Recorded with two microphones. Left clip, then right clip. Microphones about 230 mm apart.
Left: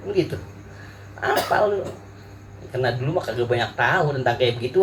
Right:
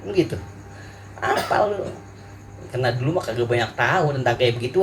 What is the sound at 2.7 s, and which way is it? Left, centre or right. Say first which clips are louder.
A man's voice: even; right.